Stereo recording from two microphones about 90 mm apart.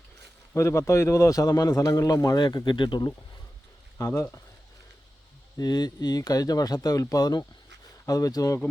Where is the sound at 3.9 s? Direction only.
35° left (ahead or behind).